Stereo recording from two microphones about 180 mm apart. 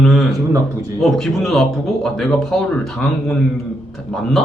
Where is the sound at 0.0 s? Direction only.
Centre (ahead or behind).